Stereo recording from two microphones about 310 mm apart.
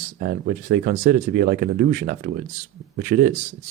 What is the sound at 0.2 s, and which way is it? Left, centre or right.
Speech, right.